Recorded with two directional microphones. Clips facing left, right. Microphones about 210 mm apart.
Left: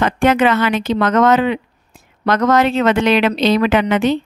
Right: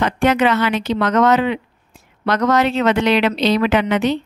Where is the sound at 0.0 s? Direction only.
50° left (ahead or behind).